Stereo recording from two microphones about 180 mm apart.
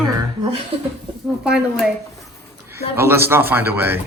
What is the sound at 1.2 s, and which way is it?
Speech, 5° right (ahead or behind).